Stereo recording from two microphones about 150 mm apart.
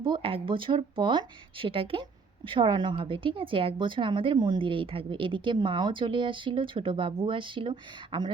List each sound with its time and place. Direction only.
0.0 s speech: 35° right (ahead or behind)